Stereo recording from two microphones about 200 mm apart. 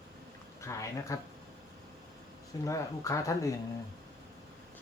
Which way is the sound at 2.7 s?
15° left (ahead or behind).